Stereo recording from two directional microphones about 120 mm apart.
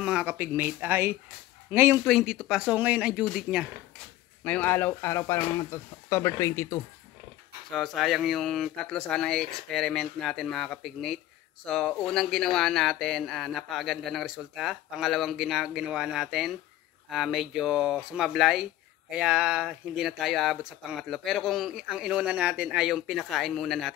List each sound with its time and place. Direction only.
0.0 s speech: 10° right (ahead or behind)
2.0 s speech: centre (ahead or behind)
4.5 s speech: 15° left (ahead or behind)
7.7 s speech: centre (ahead or behind)